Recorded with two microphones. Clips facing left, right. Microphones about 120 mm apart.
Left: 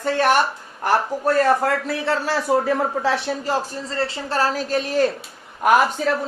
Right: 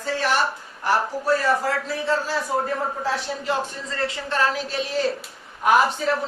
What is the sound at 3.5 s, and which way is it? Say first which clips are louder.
A woman's voice: right 1 dB; 35° left (ahead or behind).